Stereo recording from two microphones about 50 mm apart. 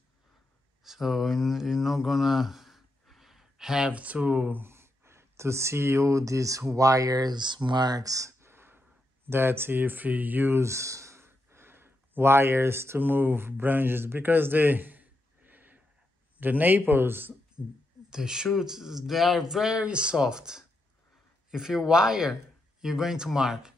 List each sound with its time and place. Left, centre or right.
0.8 s speech: centre
3.9 s speech: right
4.6 s speech: right
7.6 s speech: right
8.2 s a sound: right
10.5 s speech: right
11.2 s a sound: right
13.0 s a man's voice: right
18.1 s speech: centre